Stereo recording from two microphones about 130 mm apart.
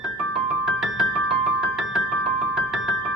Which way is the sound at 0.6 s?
5° right (ahead or behind).